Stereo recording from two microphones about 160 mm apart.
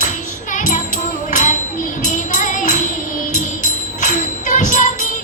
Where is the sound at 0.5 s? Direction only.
50° left (ahead or behind).